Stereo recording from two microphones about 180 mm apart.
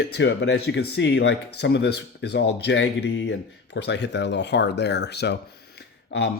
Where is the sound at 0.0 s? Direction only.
75° left (ahead or behind).